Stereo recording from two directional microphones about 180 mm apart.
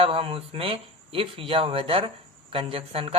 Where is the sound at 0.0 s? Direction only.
30° right (ahead or behind).